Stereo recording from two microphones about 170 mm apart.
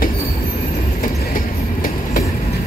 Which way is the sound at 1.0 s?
55° left (ahead or behind).